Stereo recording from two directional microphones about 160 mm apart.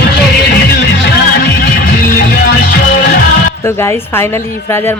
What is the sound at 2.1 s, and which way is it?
Music, 75° left (ahead or behind).